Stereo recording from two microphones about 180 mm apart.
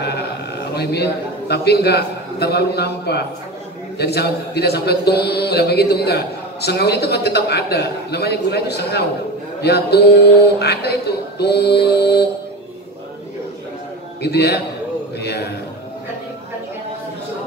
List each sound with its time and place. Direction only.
1.5 s a man's voice: 65° left (ahead or behind)
14.2 s a man's voice: 65° left (ahead or behind)
15.1 s a sound: 65° left (ahead or behind)